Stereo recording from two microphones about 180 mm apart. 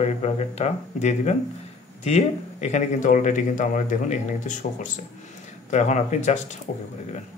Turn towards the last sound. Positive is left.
turn(degrees=40)  # may be behind; listen again after turning